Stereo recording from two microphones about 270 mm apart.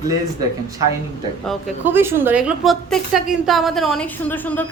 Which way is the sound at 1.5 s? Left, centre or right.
Centre.